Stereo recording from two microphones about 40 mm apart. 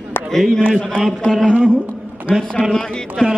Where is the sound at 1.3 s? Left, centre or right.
Left.